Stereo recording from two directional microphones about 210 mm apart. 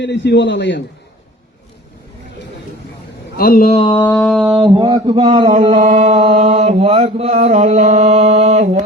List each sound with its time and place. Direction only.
0.0 s a man's voice: 55° left (ahead or behind)
3.3 s speech: 45° left (ahead or behind)
3.7 s mantra: 25° left (ahead or behind)
4.0 s a sound: centre (ahead or behind)
4.5 s speech: 5° right (ahead or behind)
4.8 s speech: 20° right (ahead or behind)
5.5 s mantra: 35° right (ahead or behind)